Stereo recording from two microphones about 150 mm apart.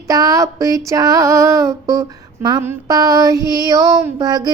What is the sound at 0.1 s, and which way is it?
Female singing, 25° right (ahead or behind).